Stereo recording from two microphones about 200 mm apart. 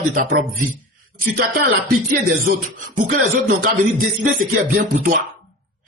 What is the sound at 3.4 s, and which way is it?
Speech, 45° right (ahead or behind).